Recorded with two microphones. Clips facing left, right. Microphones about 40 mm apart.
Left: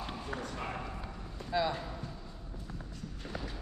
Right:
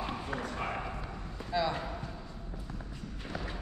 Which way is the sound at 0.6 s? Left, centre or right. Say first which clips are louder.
Right 3 dB; right.